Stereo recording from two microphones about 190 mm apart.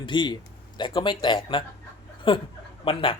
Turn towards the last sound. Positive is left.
turn(degrees=25)  # may be behind; listen again after turning